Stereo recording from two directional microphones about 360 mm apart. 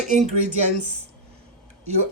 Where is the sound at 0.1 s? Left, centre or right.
Centre.